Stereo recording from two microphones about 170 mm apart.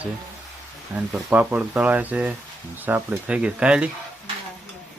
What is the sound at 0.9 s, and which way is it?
Speech, 10° right (ahead or behind).